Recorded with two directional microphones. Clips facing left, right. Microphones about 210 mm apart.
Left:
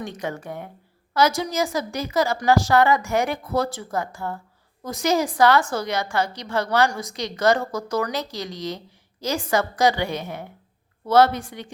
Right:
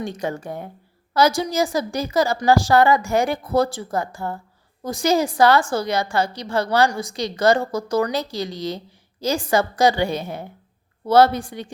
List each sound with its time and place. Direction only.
0.0 s a woman's voice: 30° right (ahead or behind)